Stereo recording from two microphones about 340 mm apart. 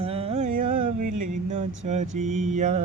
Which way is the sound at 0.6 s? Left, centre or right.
Right.